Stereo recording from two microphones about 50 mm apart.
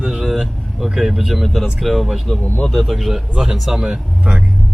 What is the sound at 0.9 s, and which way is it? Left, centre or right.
Speech, centre.